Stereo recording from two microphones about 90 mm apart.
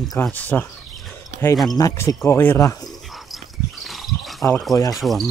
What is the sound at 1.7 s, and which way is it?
Speech, 40° left (ahead or behind).